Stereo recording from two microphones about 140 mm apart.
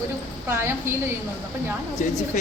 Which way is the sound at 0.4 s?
15° right (ahead or behind).